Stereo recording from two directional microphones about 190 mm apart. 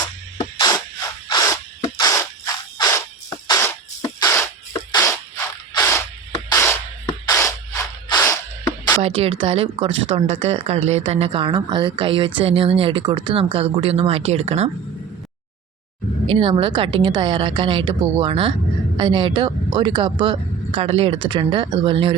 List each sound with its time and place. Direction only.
1.3 s a sound: 20° left (ahead or behind)
2.0 s insect: 15° left (ahead or behind)
4.9 s music: 15° left (ahead or behind)
5.8 s spray: 15° left (ahead or behind)
9.0 s speech: 30° right (ahead or behind)
16.2 s speech: 30° right (ahead or behind)